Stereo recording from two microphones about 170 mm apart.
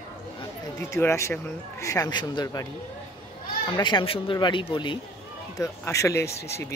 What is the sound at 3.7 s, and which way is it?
Speech, 30° left (ahead or behind).